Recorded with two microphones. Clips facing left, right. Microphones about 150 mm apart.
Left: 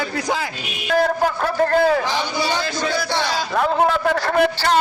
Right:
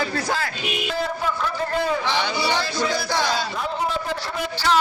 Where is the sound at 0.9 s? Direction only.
60° left (ahead or behind).